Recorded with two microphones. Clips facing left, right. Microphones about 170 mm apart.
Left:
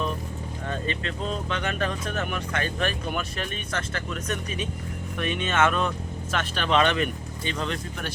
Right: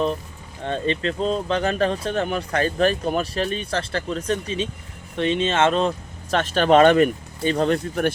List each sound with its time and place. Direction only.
0.6 s speech: 30° right (ahead or behind)
6.3 s speech: 40° right (ahead or behind)